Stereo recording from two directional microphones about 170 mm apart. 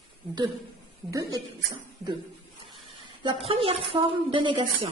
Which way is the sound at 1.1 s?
20° right (ahead or behind).